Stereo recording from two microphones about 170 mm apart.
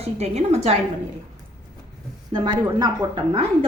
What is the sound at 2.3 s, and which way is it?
A woman's voice, 25° right (ahead or behind).